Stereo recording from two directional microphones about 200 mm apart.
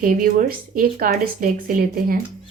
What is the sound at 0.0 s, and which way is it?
A woman's voice, 45° right (ahead or behind).